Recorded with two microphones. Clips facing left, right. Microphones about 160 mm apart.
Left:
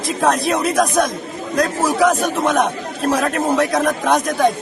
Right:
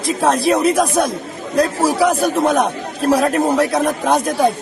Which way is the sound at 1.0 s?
30° right (ahead or behind).